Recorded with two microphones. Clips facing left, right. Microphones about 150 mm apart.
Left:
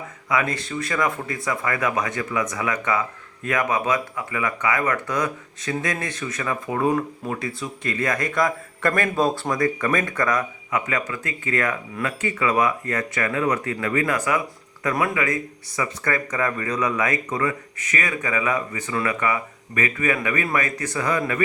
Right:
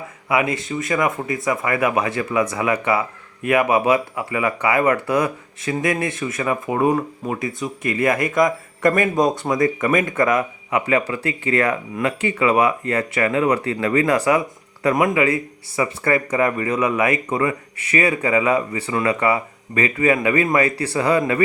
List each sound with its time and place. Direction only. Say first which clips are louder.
0.5 s speech: right 4 dB; 20° right (ahead or behind)
14.9 s speech: right 5 dB; 20° right (ahead or behind)